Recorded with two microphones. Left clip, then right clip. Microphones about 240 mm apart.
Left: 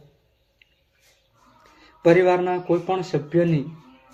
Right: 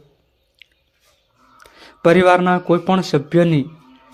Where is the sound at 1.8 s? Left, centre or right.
Right.